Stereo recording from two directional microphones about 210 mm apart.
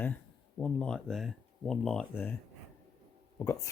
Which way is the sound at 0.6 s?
5° left (ahead or behind).